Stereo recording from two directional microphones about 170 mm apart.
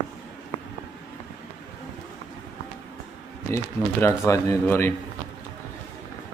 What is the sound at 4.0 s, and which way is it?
Speech, 15° left (ahead or behind).